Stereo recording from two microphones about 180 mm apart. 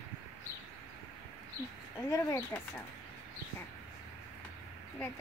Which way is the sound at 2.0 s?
15° left (ahead or behind).